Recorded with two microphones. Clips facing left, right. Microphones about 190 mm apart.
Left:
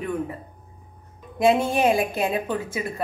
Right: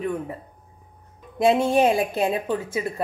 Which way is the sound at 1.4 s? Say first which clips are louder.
Right 1 dB; 30° right (ahead or behind).